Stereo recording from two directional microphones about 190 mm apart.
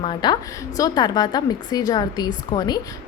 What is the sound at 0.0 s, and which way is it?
A woman's voice, 25° left (ahead or behind).